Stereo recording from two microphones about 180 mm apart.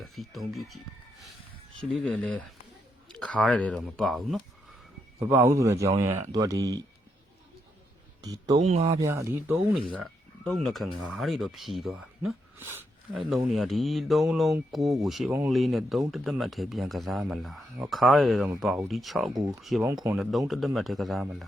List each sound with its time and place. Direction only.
0.0 s speech: centre (ahead or behind)
1.8 s speech: 5° left (ahead or behind)
5.2 s speech: 10° right (ahead or behind)
8.2 s speech: 20° right (ahead or behind)
8.5 s speech: 40° right (ahead or behind)
8.9 s speech: 15° right (ahead or behind)
9.9 s speech: 5° left (ahead or behind)
19.3 s speech: 20° right (ahead or behind)
20.5 s speech: centre (ahead or behind)